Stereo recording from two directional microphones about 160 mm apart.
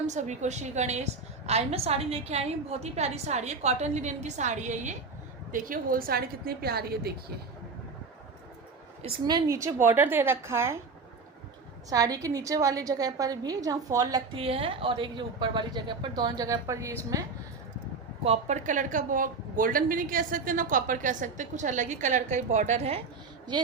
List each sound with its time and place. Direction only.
0.1 s a woman's voice: 45° right (ahead or behind)
5.5 s a woman's voice: 60° right (ahead or behind); by 7.1 s 75° right (ahead or behind)
9.2 s a woman's voice: 25° right (ahead or behind)
11.9 s speech: 25° right (ahead or behind)
14.3 s speech: 35° right (ahead or behind); by 17.3 s 20° right (ahead or behind)
18.2 s a woman's voice: 45° right (ahead or behind)